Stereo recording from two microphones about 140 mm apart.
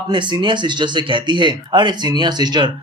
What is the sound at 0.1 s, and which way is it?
Speech, 35° right (ahead or behind).